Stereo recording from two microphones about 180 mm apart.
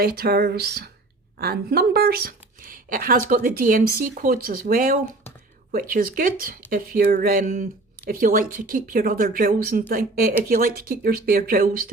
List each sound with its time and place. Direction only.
0.0 s a woman's voice: 55° right (ahead or behind)